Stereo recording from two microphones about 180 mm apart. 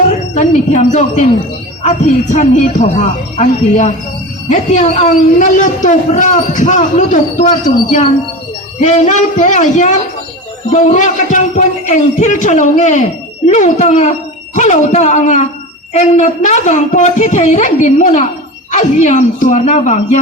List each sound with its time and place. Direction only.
0.1 s a woman's voice: 45° left (ahead or behind)